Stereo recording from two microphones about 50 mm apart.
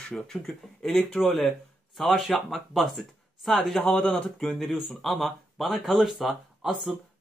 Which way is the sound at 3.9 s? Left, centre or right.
Left.